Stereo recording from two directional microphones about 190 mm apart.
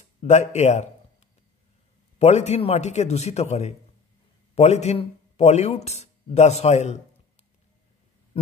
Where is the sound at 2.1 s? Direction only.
35° left (ahead or behind).